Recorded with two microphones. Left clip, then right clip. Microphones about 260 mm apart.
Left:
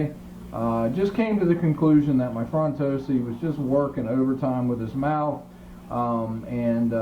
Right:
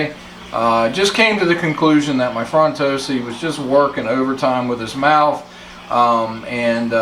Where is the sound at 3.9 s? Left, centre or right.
Centre.